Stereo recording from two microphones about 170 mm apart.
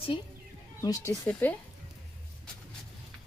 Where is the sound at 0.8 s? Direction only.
15° left (ahead or behind).